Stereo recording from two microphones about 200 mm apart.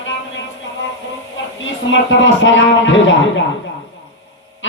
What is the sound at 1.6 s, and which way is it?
Speech, 70° left (ahead or behind).